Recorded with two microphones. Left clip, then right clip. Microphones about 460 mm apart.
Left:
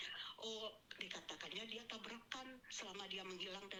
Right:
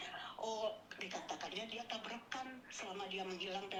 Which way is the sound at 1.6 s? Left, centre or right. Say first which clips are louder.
Right 5 dB; left.